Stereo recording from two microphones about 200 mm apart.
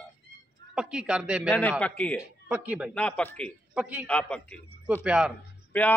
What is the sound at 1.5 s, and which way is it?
Speech, 10° left (ahead or behind).